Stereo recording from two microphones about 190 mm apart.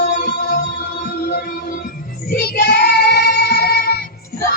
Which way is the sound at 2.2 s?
55° left (ahead or behind).